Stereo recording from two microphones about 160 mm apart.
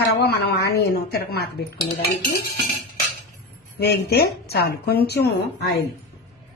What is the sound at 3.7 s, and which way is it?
A woman's voice, 80° left.